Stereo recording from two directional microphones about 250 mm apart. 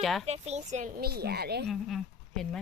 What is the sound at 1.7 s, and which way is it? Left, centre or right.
Speech, centre.